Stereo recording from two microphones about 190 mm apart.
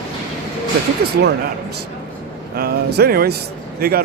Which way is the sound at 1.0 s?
55° right (ahead or behind).